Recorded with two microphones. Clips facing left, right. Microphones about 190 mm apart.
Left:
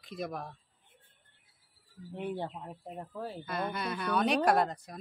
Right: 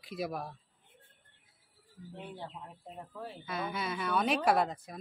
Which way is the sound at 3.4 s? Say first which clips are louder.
Left 1 dB; centre (ahead or behind).